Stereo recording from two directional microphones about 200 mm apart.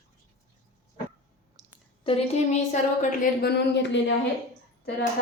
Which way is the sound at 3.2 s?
50° left (ahead or behind).